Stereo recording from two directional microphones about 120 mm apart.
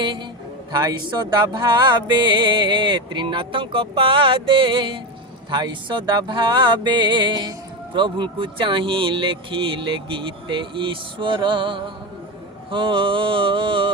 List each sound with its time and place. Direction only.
0.0 s a man's voice: 45° right (ahead or behind)
0.7 s music: 35° right (ahead or behind)